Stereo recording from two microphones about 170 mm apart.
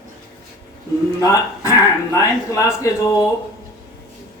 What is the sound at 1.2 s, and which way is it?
Speech, 20° left (ahead or behind).